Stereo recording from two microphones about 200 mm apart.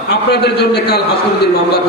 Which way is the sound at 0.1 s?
55° left (ahead or behind).